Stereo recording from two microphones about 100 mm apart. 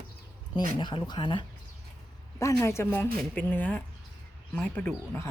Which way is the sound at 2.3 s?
30° left (ahead or behind).